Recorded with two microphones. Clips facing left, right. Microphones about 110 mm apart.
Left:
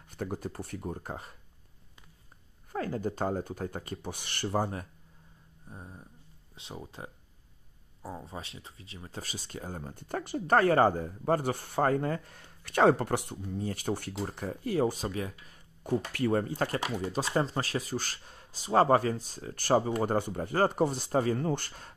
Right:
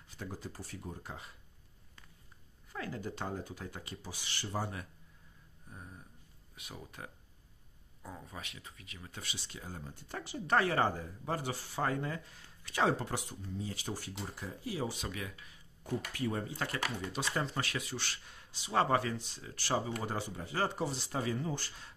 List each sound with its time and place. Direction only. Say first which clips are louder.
0.1 s speech: left 8 dB; 55° left (ahead or behind)
2.7 s speech: left 8 dB; 45° left (ahead or behind)
5.7 s speech: left 4 dB; 25° left (ahead or behind); by 15.0 s 50° left (ahead or behind)
15.0 s speech: left 7 dB; 35° left (ahead or behind)
16.1 s speech: left 9 dB; 65° left (ahead or behind)